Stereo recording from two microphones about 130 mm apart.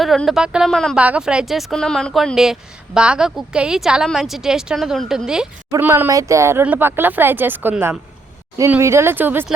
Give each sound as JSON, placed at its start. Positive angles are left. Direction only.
{"t": 0.0, "sound": "speech", "side_deg": 0}
{"t": 0.9, "sound": "speech", "side_deg": -10}
{"t": 5.8, "sound": "speech", "side_deg": -15}